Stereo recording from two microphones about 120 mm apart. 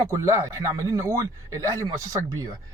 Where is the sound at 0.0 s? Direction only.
25° right (ahead or behind).